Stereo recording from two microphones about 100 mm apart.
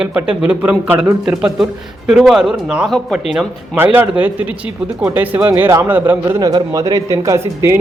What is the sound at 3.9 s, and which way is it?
Speech, 15° right (ahead or behind).